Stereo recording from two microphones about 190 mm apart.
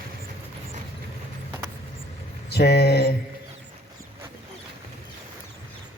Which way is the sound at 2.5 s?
60° left (ahead or behind).